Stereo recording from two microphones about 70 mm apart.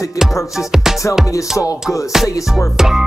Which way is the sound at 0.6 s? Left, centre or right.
Centre.